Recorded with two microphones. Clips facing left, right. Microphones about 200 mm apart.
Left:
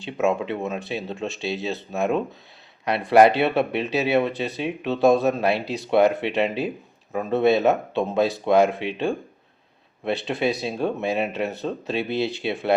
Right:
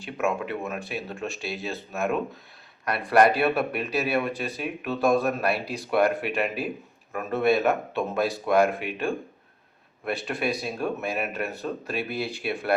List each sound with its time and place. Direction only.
0.0 s speech: 25° left (ahead or behind)